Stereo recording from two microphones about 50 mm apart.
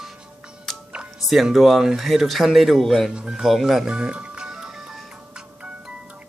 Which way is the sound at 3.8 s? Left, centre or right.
Right.